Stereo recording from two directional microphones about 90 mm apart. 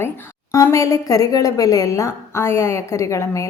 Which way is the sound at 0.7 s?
35° left (ahead or behind).